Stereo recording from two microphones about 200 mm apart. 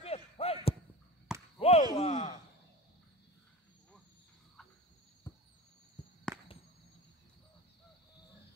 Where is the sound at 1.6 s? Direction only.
30° left (ahead or behind).